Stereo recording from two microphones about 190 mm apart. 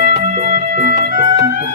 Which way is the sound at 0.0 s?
45° right (ahead or behind).